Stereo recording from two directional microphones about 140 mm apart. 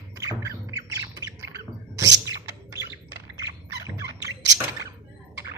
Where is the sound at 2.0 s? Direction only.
25° right (ahead or behind).